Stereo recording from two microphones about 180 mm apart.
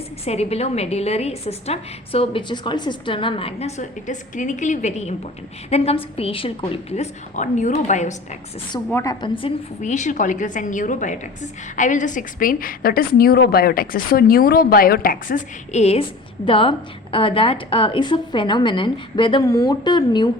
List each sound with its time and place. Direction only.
0.3 s a woman's voice: 35° left (ahead or behind)
8.9 s a woman's voice: 15° left (ahead or behind)
9.2 s a woman's voice: 30° left (ahead or behind)
9.8 s a woman's voice: 40° left (ahead or behind); by 20.3 s 25° left (ahead or behind)